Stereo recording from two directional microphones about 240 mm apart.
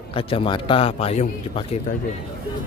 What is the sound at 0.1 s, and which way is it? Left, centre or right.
A man's voice, left.